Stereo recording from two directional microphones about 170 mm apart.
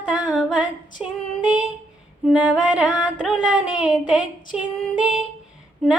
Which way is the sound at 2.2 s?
5° right (ahead or behind).